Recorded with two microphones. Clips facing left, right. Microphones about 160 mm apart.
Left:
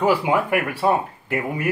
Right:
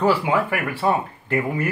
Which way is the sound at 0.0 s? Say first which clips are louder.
Even; 15° left (ahead or behind).